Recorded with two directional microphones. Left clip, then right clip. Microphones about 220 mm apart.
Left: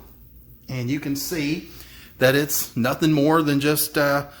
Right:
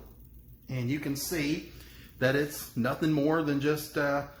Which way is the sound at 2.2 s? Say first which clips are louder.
Left 9 dB; 50° left (ahead or behind).